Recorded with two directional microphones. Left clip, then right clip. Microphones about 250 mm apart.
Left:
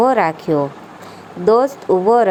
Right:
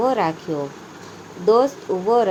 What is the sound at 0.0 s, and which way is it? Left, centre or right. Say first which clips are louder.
A woman's voice: left 6 dB; left.